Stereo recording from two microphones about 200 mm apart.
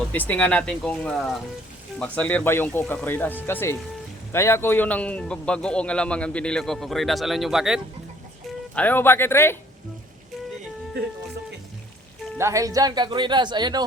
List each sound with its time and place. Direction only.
0.1 s a man's voice: 10° left (ahead or behind)
8.7 s speech: 10° left (ahead or behind)
12.4 s speech: 15° right (ahead or behind)